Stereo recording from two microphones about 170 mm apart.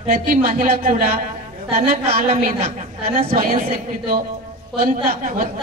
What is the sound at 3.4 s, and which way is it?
Speech, 55° right (ahead or behind).